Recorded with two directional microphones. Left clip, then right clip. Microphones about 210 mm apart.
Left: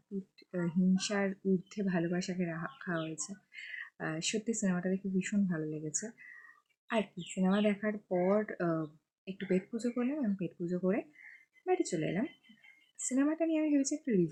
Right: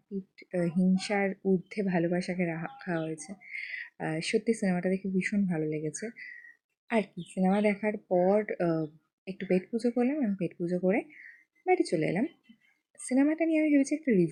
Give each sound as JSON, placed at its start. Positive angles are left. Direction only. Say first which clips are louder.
{"t": 0.3, "sound": "speech", "louder": "right 6 dB", "side_deg": -15}
{"t": 7.4, "sound": "speech", "louder": "right 5 dB", "side_deg": -20}